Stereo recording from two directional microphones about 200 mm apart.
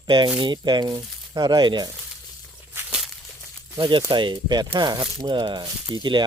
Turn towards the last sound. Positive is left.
turn(degrees=-25)  # may be behind; listen again after turning